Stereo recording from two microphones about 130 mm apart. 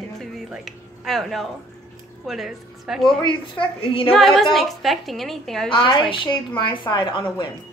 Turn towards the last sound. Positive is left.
turn(degrees=35)  # may be behind; listen again after turning